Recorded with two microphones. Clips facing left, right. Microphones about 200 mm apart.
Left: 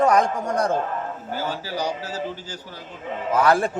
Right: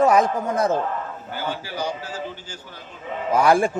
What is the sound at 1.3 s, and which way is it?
Speech, 40° left (ahead or behind).